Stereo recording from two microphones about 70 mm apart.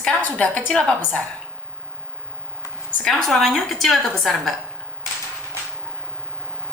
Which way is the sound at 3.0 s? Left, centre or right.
Centre.